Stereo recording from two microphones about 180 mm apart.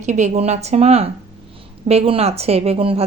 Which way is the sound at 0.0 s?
40° right (ahead or behind).